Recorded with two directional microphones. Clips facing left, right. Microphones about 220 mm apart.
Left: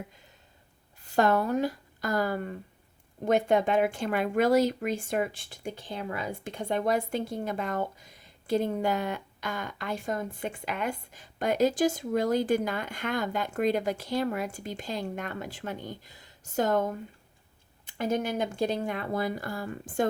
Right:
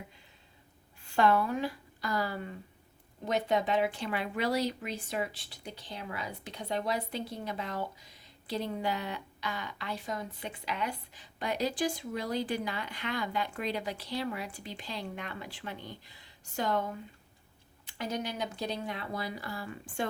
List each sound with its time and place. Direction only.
1.0 s speech: 40° left (ahead or behind)